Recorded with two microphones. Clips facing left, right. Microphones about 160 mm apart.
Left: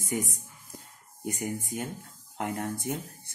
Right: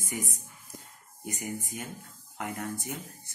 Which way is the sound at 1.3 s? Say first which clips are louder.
Left 3 dB; 55° left (ahead or behind).